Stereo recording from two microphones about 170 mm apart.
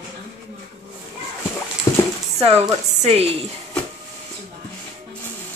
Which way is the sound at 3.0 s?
35° right (ahead or behind).